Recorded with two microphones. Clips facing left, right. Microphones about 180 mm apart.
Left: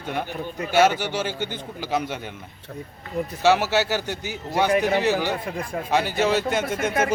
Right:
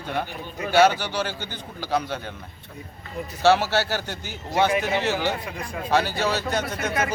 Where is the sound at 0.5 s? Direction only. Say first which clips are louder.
Right 1 dB; 45° left (ahead or behind).